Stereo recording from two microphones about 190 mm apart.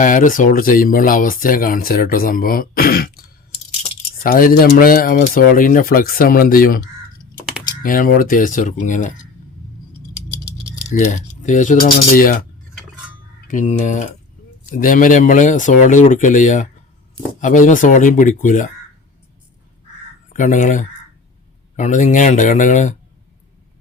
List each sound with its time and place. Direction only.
0.0 s speech: 45° left (ahead or behind)
10.8 s speech: 40° left (ahead or behind)
13.5 s speech: 40° left (ahead or behind)
20.3 s speech: 40° left (ahead or behind)